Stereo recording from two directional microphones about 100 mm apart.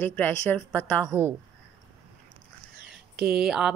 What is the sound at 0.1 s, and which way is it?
Speech, 20° left (ahead or behind).